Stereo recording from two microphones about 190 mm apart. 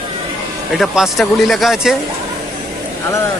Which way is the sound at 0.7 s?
Centre (ahead or behind).